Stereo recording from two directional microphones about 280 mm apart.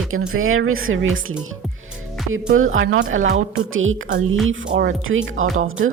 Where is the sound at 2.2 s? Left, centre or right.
Right.